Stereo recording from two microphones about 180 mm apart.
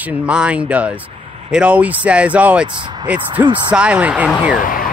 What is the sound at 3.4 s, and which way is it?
Speech, 15° right (ahead or behind).